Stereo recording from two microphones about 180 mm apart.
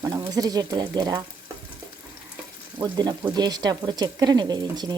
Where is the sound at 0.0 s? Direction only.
20° right (ahead or behind).